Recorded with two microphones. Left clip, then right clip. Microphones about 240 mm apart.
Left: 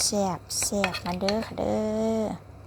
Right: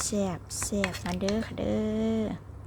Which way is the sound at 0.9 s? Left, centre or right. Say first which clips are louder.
Left 4 dB; centre.